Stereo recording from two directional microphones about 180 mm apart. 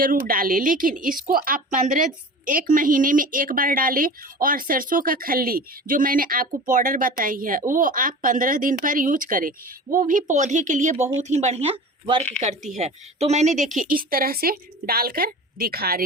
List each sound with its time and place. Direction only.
0.0 s speech: 50° right (ahead or behind)
13.7 s a woman's voice: 50° right (ahead or behind)